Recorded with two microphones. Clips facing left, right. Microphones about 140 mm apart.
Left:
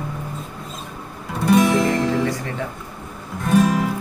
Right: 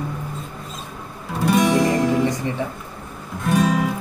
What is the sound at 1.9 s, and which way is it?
Music, 20° right (ahead or behind).